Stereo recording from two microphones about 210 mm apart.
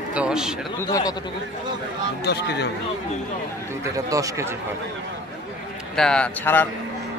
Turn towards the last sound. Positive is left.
turn(degrees=5)  # may be behind; listen again after turning